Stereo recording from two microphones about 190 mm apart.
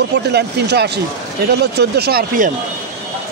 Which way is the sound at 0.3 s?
60° right (ahead or behind).